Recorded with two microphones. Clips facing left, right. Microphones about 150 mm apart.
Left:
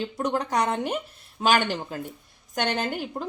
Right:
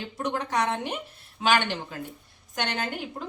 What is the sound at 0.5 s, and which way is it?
A woman's voice, 40° left (ahead or behind).